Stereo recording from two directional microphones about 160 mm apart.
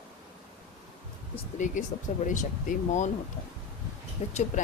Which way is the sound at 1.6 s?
50° left (ahead or behind).